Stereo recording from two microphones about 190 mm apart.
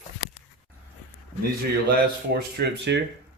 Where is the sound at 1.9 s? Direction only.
55° right (ahead or behind).